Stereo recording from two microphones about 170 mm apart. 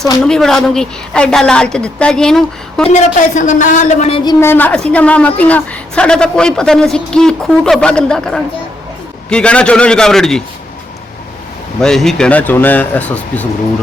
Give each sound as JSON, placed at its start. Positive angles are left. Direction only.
{"t": 0.2, "sound": "a woman's voice", "side_deg": 5}
{"t": 2.9, "sound": "a man's voice", "side_deg": 45}
{"t": 4.2, "sound": "a woman's voice", "side_deg": 20}
{"t": 11.8, "sound": "speech", "side_deg": 5}